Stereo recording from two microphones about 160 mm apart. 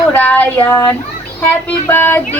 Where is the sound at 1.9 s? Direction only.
15° left (ahead or behind).